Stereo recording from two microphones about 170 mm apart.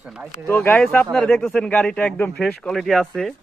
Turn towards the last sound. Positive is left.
turn(degrees=0)  # may be behind; listen again after turning